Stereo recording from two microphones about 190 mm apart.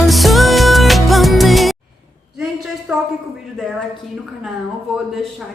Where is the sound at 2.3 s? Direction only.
Centre (ahead or behind).